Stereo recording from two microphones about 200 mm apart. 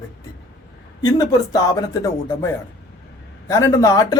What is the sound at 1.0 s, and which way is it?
Speech, 20° left (ahead or behind).